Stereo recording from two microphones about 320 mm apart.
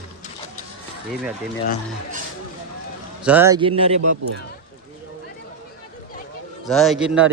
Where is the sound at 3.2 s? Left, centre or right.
Centre.